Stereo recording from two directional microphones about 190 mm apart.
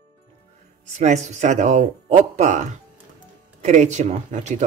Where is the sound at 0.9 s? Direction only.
40° right (ahead or behind).